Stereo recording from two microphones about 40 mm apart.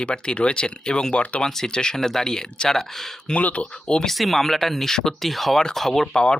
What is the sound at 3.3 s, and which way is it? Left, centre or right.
Speech, left.